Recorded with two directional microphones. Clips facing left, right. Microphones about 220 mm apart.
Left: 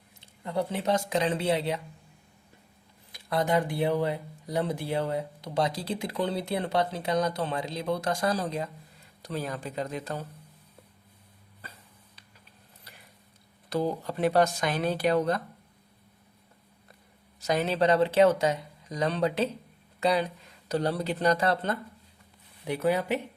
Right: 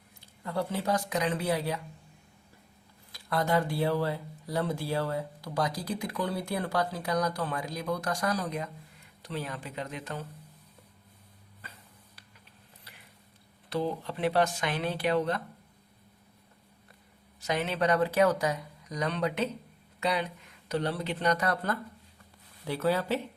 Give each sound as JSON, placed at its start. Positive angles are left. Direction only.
{"t": 0.2, "sound": "speech", "side_deg": 20}
{"t": 3.1, "sound": "speech", "side_deg": 20}
{"t": 9.2, "sound": "speech", "side_deg": 40}
{"t": 13.7, "sound": "speech", "side_deg": 40}
{"t": 17.4, "sound": "speech", "side_deg": 40}